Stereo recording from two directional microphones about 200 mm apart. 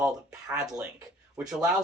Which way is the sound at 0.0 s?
5° right (ahead or behind).